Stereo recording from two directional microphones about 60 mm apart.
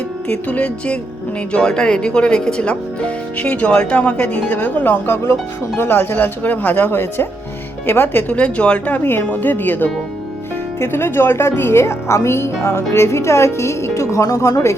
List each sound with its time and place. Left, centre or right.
0.3 s speech: left
8.4 s speech: left
9.0 s speech: left